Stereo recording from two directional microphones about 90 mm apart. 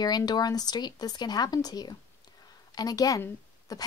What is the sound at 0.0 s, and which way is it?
A woman's voice, 50° left (ahead or behind).